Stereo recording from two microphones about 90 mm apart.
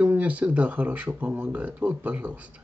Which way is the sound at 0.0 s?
15° right (ahead or behind).